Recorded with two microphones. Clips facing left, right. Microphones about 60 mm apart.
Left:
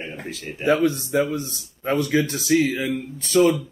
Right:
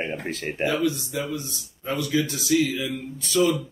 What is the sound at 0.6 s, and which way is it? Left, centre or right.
Speech, left.